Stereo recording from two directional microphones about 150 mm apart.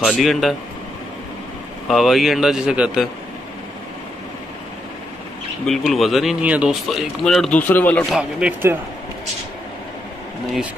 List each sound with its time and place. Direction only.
0.0 s speech: centre (ahead or behind)
1.9 s speech: centre (ahead or behind)
5.7 s speech: centre (ahead or behind)
8.1 s speech: 5° right (ahead or behind)